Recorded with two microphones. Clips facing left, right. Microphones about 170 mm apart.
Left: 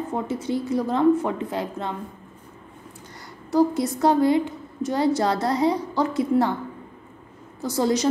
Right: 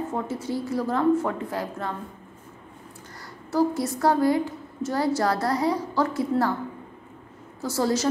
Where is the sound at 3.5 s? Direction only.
20° left (ahead or behind).